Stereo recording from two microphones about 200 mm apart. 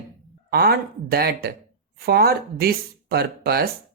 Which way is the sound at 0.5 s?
50° right (ahead or behind).